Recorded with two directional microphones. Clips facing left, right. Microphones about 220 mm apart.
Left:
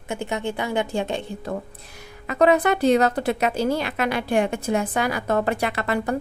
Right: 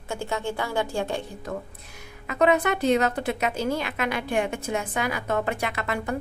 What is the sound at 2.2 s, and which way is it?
A woman's voice, 35° left (ahead or behind).